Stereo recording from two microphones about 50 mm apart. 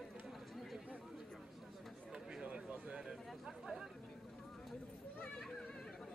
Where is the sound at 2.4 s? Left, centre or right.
Right.